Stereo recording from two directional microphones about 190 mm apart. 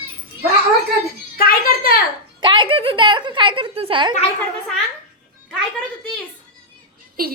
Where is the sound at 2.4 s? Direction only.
25° right (ahead or behind).